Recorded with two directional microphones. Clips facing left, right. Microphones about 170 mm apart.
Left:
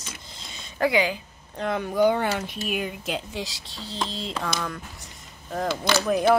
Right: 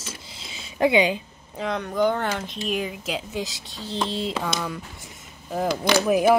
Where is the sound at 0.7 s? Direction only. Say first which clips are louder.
Right 3 dB; 20° right (ahead or behind).